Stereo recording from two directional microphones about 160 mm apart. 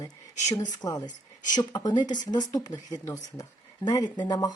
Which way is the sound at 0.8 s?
25° left (ahead or behind).